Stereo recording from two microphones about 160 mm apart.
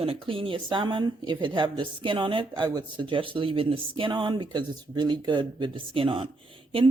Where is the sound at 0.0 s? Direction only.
35° right (ahead or behind).